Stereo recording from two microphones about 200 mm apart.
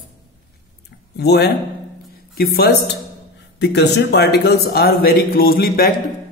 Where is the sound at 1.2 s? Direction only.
55° left (ahead or behind).